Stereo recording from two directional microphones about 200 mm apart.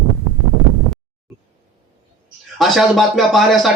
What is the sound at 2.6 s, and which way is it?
Speech, centre (ahead or behind).